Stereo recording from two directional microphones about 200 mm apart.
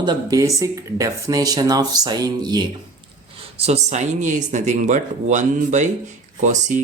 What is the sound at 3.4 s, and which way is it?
Speech, 30° right (ahead or behind).